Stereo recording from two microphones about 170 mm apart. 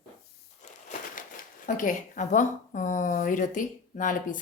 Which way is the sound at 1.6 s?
50° left (ahead or behind).